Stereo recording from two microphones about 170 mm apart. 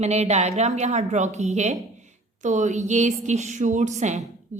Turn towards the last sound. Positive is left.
turn(degrees=-45)  # may be behind; listen again after turning